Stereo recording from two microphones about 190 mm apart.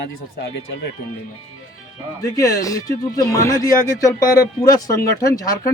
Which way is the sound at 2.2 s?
20° left (ahead or behind).